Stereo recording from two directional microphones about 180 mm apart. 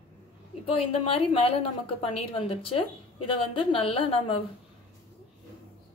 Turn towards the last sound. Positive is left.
turn(degrees=30)  # may be behind; listen again after turning